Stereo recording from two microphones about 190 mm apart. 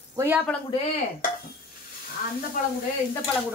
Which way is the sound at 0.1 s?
15° right (ahead or behind).